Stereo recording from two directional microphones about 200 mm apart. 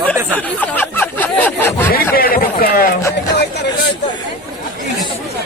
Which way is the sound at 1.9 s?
45° left (ahead or behind).